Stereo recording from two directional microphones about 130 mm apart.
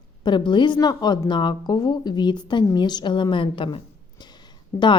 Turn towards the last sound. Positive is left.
turn(degrees=35)  # may be behind; listen again after turning